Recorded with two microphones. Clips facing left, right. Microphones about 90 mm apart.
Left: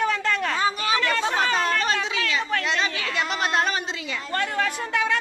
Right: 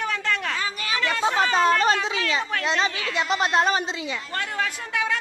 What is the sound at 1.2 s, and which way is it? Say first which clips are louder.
Speech: right 3 dB; 20° right (ahead or behind).